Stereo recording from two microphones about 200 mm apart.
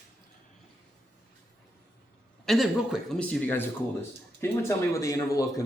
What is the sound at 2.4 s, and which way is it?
A man's voice, centre (ahead or behind).